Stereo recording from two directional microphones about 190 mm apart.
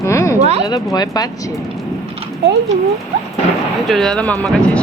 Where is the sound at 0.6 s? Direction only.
20° left (ahead or behind).